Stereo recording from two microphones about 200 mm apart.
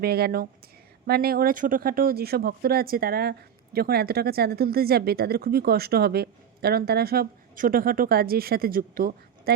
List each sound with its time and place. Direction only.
0.0 s speech: 50° right (ahead or behind)